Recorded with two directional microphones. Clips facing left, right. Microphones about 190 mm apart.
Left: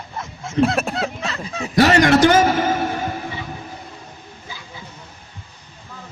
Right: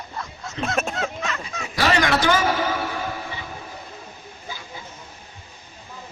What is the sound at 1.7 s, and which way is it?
A man's voice, 45° left (ahead or behind).